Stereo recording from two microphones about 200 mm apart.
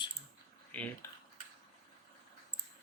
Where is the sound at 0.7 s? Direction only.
10° left (ahead or behind).